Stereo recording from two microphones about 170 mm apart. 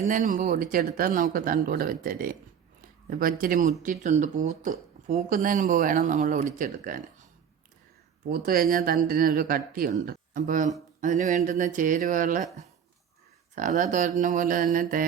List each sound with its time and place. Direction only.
0.0 s speech: 50° right (ahead or behind)
8.3 s speech: 60° right (ahead or behind)
13.6 s speech: 45° right (ahead or behind)